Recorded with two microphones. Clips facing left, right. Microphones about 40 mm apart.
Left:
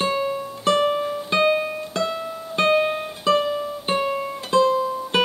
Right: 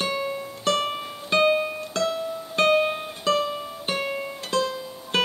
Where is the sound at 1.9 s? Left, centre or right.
Centre.